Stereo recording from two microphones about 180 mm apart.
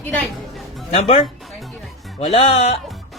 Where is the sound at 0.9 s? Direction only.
30° left (ahead or behind).